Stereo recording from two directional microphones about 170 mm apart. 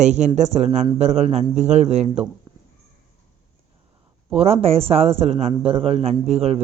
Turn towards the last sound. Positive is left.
turn(degrees=-40)  # may be behind; listen again after turning